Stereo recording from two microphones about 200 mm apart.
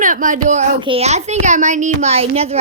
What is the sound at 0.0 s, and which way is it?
Speech, 40° right (ahead or behind).